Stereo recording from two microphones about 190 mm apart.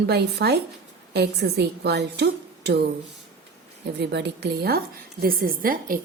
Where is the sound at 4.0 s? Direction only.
60° right (ahead or behind).